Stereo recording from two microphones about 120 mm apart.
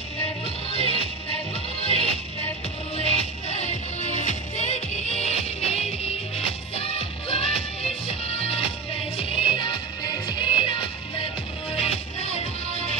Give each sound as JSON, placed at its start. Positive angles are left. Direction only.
{"t": 0.7, "sound": "music", "side_deg": 55}
{"t": 12.4, "sound": "music", "side_deg": 60}